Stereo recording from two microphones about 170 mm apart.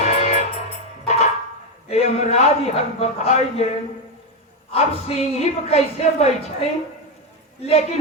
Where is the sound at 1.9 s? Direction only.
40° left (ahead or behind).